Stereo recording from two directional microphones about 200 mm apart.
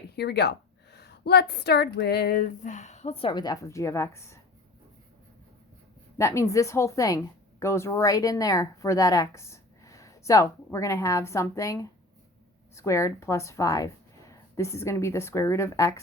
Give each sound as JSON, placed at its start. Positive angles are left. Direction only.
{"t": 0.2, "sound": "a woman's voice", "side_deg": 55}
{"t": 6.1, "sound": "a woman's voice", "side_deg": 15}